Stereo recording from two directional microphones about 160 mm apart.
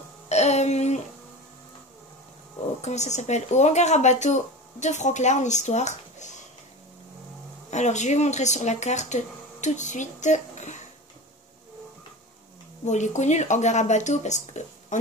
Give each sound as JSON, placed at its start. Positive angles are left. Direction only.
{"t": 0.3, "sound": "music", "side_deg": 45}
{"t": 2.8, "sound": "speech", "side_deg": 45}
{"t": 7.7, "sound": "speech", "side_deg": 45}
{"t": 12.8, "sound": "speech", "side_deg": 45}